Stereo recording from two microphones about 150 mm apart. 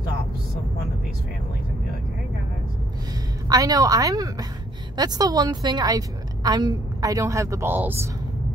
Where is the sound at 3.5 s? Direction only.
25° right (ahead or behind).